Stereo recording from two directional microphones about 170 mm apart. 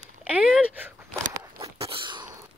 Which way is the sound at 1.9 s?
30° right (ahead or behind).